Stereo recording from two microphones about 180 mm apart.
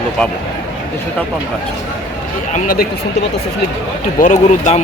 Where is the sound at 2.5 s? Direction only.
55° left (ahead or behind).